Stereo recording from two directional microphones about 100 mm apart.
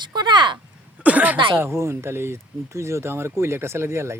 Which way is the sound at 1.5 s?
25° right (ahead or behind).